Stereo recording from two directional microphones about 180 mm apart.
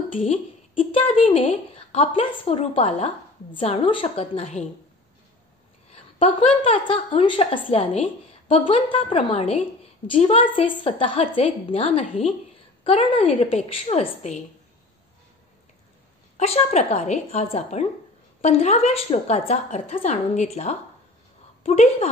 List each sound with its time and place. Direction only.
0.2 s a woman's voice: 30° left (ahead or behind)
5.9 s a woman's voice: 35° left (ahead or behind)
16.3 s a woman's voice: 40° left (ahead or behind)